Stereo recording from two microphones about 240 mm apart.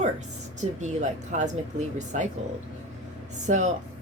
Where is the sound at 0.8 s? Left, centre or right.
Right.